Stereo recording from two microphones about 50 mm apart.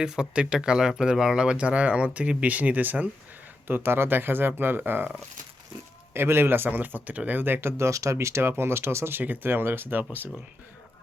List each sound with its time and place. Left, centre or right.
0.0 s speech: centre; by 3.1 s right
3.7 s speech: right
6.1 s speech: right
7.4 s speech: right
7.8 s speech: right
9.1 s speech: right